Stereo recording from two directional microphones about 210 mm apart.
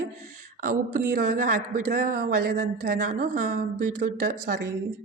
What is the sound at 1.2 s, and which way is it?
A woman's voice, 40° right (ahead or behind).